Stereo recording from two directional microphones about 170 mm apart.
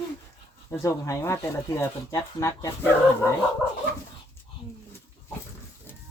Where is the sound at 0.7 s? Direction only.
20° left (ahead or behind).